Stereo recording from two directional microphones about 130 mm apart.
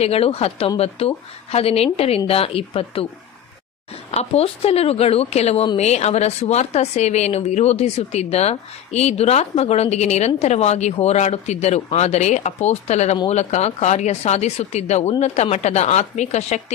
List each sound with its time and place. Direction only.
0.0 s a woman's voice: 50° left (ahead or behind)
4.1 s a woman's voice: 55° left (ahead or behind)